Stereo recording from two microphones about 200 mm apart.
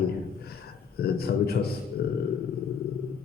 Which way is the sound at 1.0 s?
50° left (ahead or behind).